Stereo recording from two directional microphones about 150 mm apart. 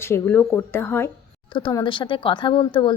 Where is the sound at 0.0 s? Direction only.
15° left (ahead or behind).